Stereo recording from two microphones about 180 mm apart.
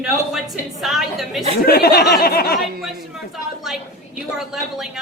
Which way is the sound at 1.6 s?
55° left (ahead or behind).